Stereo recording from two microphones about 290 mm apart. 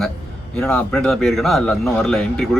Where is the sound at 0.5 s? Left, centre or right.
Centre.